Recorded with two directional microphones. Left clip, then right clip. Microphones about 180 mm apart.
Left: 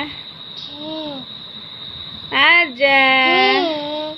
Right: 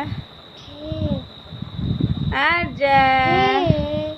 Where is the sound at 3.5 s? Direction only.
50° right (ahead or behind).